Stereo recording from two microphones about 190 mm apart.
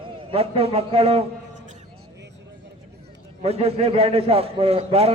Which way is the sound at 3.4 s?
35° right (ahead or behind).